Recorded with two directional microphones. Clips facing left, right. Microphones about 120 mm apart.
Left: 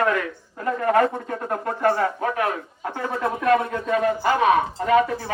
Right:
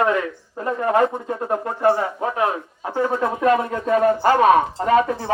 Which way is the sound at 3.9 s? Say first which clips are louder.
Right 5 dB; 40° right (ahead or behind).